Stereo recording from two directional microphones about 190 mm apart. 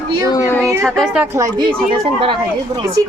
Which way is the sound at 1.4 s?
20° right (ahead or behind).